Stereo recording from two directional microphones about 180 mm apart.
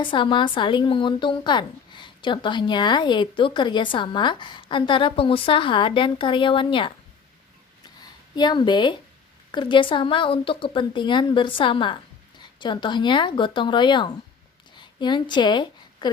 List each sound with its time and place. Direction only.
0.0 s a woman's voice: 25° left (ahead or behind)
8.4 s a woman's voice: 25° left (ahead or behind)